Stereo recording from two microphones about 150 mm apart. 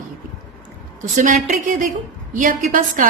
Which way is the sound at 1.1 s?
55° right (ahead or behind).